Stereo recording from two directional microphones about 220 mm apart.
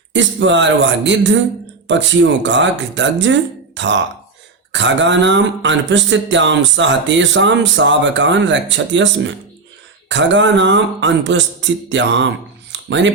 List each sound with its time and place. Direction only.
0.1 s speech: 55° right (ahead or behind)